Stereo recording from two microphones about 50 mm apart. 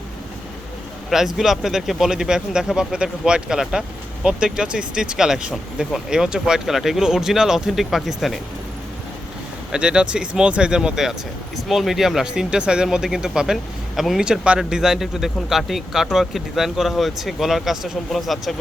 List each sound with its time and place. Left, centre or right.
1.1 s a man's voice: centre
9.7 s speech: centre
11.5 s a man's voice: centre
12.3 s speech: centre
14.2 s speech: centre
14.6 s a man's voice: centre